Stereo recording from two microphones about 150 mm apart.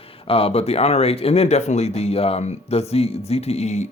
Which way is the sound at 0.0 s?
40° left (ahead or behind).